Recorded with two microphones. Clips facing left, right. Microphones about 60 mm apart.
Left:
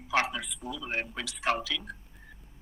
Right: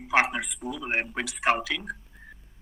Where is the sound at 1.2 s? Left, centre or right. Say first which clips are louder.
Right 6 dB; right.